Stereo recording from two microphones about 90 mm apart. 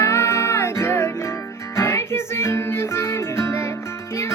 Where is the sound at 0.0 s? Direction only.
30° left (ahead or behind).